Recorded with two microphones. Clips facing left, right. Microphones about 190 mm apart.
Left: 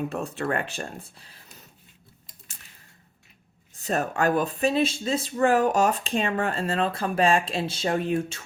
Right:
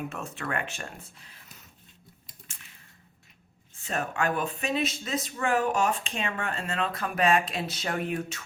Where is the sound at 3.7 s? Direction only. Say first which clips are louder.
Left 5 dB; 40° left (ahead or behind).